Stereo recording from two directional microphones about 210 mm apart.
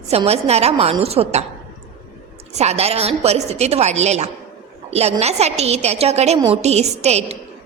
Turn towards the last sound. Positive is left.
turn(degrees=-30)  # may be behind; listen again after turning